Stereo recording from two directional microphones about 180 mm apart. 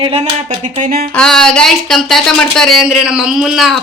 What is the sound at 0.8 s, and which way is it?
Speech, 50° right (ahead or behind).